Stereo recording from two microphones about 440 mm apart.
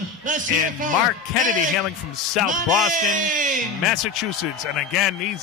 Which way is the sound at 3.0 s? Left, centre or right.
Centre.